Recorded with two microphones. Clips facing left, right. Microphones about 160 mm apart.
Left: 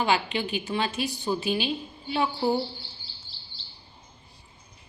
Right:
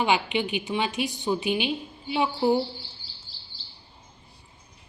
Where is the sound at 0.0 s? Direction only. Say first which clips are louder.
Right 1 dB; 15° right (ahead or behind).